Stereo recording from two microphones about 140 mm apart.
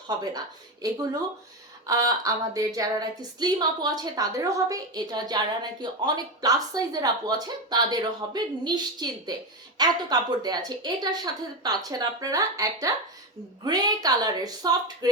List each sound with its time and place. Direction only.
0.3 s speech: 25° right (ahead or behind)